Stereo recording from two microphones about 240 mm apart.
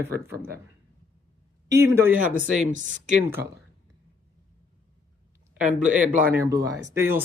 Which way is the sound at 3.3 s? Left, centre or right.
Centre.